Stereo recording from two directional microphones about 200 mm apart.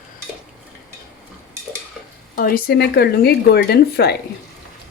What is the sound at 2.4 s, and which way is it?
Speech, 45° left (ahead or behind).